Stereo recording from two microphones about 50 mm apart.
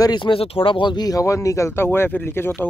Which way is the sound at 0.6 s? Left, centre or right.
Left.